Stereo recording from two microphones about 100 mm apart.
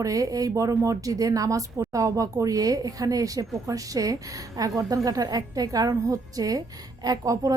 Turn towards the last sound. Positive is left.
turn(degrees=-40)  # may be behind; listen again after turning